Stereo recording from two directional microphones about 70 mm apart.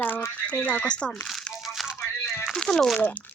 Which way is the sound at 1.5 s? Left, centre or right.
Centre.